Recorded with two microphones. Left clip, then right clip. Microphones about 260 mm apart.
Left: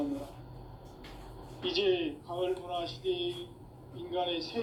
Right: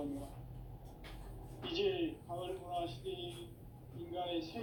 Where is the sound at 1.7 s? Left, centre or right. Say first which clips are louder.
Left 7 dB; left.